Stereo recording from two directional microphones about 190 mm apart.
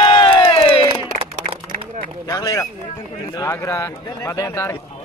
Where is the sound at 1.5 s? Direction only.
35° right (ahead or behind).